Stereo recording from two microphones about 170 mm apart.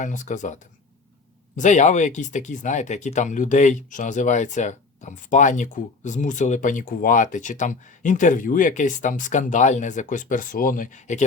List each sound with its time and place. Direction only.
0.0 s speech: 45° left (ahead or behind)
1.5 s speech: 45° left (ahead or behind)